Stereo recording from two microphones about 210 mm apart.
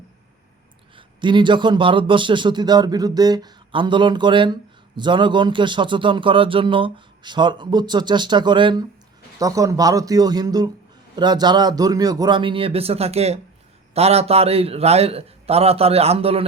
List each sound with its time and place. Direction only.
0.9 s a man's voice: 20° right (ahead or behind)